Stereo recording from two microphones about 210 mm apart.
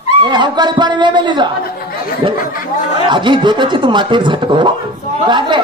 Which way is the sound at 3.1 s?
20° right (ahead or behind).